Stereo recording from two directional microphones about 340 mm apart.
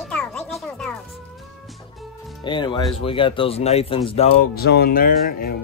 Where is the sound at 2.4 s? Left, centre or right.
Centre.